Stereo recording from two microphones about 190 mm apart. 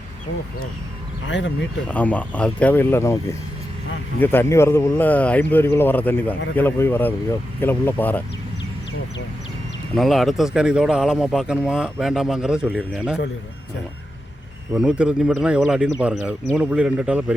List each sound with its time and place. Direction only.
1.3 s speech: 70° left (ahead or behind)
1.9 s speech: 5° left (ahead or behind)
9.9 s speech: centre (ahead or behind)
14.8 s speech: 5° right (ahead or behind)